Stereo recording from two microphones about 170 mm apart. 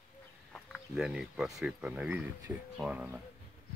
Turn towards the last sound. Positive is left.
turn(degrees=-5)  # may be behind; listen again after turning